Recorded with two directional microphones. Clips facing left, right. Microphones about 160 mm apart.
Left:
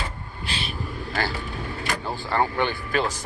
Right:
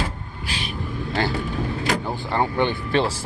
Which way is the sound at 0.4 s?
15° right (ahead or behind).